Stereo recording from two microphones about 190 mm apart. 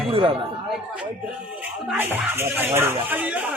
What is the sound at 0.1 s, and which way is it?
Speech, 25° right (ahead or behind).